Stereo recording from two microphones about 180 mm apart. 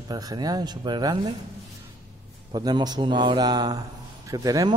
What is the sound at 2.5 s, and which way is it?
A man's voice, 25° right (ahead or behind).